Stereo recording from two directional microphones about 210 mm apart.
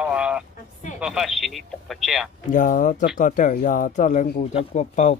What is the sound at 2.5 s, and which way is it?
Speech, 40° left (ahead or behind).